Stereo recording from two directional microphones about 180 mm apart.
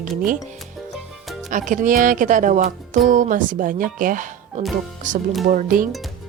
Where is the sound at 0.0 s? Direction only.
50° right (ahead or behind).